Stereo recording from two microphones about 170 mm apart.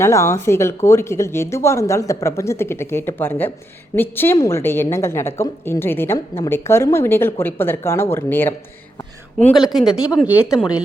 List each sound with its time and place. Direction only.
0.0 s a woman's voice: 15° left (ahead or behind)
9.6 s speech: 25° left (ahead or behind)
10.2 s speech: 5° right (ahead or behind)